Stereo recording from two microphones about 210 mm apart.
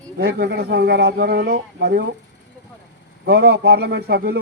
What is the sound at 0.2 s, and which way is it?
Speech, 50° right (ahead or behind).